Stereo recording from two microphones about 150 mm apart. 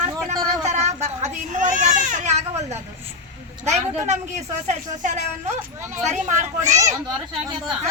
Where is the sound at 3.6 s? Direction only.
50° right (ahead or behind).